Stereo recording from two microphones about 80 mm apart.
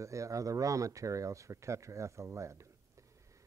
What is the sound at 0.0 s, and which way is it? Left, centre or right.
Speech, right.